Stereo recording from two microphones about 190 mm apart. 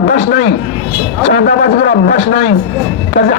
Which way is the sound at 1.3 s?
55° left (ahead or behind).